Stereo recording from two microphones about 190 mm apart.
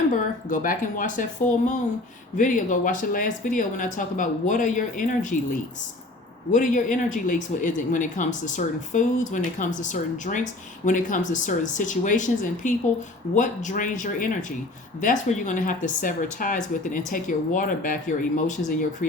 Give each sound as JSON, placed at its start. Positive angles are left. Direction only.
{"t": 0.5, "sound": "speech", "side_deg": 45}
{"t": 6.5, "sound": "speech", "side_deg": 45}